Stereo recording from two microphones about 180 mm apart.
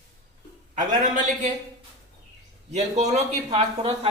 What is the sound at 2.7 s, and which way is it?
A man's voice, 40° right (ahead or behind).